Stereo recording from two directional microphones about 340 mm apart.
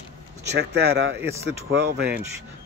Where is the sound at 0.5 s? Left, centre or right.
Right.